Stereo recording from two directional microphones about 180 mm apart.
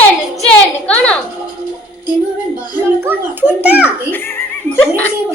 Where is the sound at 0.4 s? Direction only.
5° left (ahead or behind).